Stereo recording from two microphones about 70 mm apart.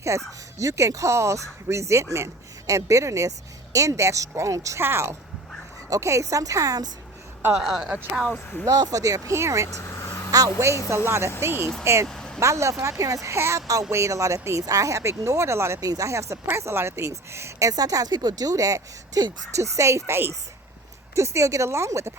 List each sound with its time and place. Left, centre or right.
0.1 s speech: right
4.8 s a woman's voice: right
5.9 s speech: right
7.6 s speech: centre
8.6 s speech: right
9.6 s vehicle: left
10.8 s a woman's voice: right
12.0 s vehicle: centre
12.4 s speech: right
15.8 s a woman's voice: right
17.7 s a woman's voice: right
21.2 s speech: right